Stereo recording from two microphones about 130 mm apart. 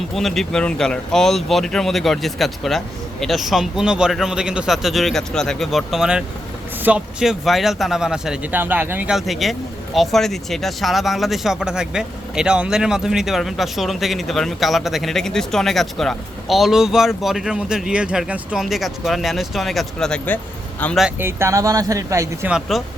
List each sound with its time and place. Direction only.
0.1 s speech: centre (ahead or behind); by 9.1 s 15° right (ahead or behind)
9.1 s speech: centre (ahead or behind)
21.2 s speech: 20° right (ahead or behind)
22.4 s speech: 5° right (ahead or behind)